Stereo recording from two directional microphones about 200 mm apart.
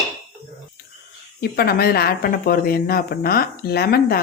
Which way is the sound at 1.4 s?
50° left (ahead or behind).